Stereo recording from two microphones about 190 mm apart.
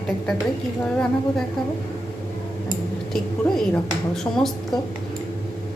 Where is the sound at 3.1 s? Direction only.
Centre (ahead or behind).